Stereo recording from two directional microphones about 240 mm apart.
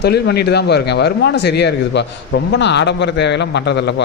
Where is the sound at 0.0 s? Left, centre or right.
Left.